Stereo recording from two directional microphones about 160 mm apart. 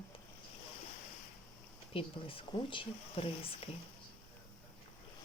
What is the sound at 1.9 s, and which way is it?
Speech, 35° left (ahead or behind).